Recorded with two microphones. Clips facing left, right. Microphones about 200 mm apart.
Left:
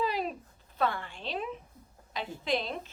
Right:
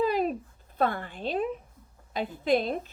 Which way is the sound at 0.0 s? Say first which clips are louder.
Right 6 dB; 50° right (ahead or behind).